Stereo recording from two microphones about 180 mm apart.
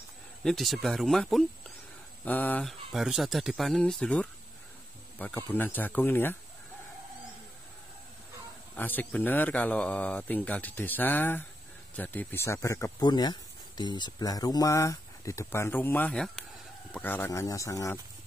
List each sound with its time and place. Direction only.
0.4 s speech: centre (ahead or behind)
8.7 s speech: 10° left (ahead or behind)